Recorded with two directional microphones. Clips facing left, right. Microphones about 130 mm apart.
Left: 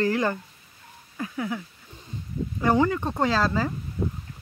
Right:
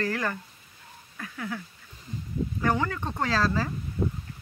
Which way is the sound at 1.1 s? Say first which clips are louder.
Left 5 dB; 20° left (ahead or behind).